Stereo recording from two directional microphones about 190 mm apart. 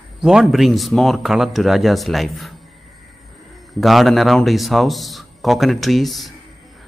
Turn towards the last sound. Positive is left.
turn(degrees=0)  # may be behind; listen again after turning